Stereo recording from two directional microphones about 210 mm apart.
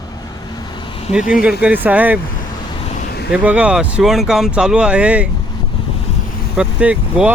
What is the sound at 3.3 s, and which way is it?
Speech, 5° right (ahead or behind).